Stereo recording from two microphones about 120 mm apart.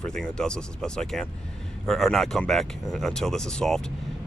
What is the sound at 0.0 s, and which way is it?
Speech, 5° left (ahead or behind).